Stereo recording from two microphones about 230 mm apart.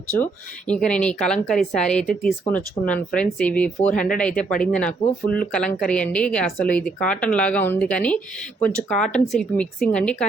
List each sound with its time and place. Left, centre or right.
0.7 s speech: centre